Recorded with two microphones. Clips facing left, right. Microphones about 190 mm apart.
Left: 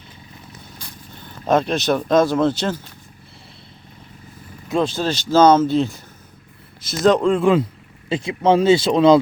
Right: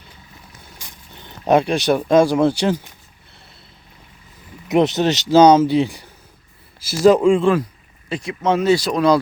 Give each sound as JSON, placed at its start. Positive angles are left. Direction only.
{"t": 0.8, "sound": "speech", "side_deg": -15}
{"t": 4.7, "sound": "speech", "side_deg": -20}
{"t": 8.1, "sound": "speech", "side_deg": 25}